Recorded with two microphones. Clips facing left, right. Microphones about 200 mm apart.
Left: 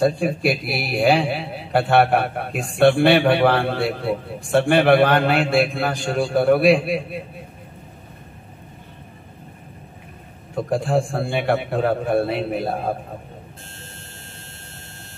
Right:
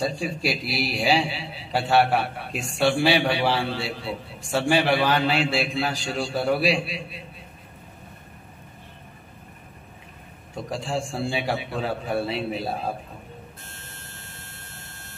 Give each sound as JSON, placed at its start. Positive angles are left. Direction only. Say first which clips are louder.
{"t": 0.0, "sound": "a man's voice", "louder": "left 7 dB", "side_deg": 55}
{"t": 10.5, "sound": "a man's voice", "louder": "left 8 dB", "side_deg": 55}